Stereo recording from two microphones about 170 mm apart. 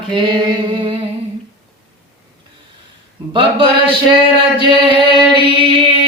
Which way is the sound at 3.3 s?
30° right (ahead or behind).